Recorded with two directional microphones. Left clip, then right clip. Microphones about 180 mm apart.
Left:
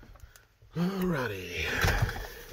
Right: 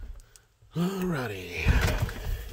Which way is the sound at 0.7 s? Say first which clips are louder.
Right 2 dB; 25° right (ahead or behind).